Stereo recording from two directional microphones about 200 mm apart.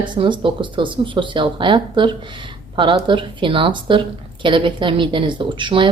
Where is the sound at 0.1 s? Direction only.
25° right (ahead or behind).